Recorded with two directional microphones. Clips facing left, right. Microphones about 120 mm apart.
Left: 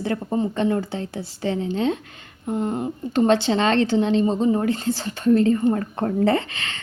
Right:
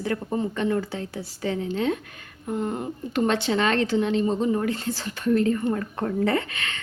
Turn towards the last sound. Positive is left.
turn(degrees=30)  # may be behind; listen again after turning